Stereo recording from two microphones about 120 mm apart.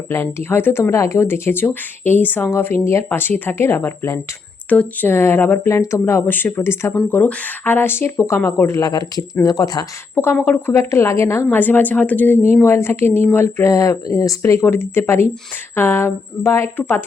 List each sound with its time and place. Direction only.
0.1 s speech: 20° left (ahead or behind)
10.2 s a woman's voice: 20° left (ahead or behind)